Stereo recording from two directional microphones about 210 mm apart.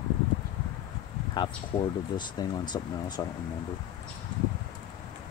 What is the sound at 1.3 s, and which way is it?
Speech, 20° left (ahead or behind).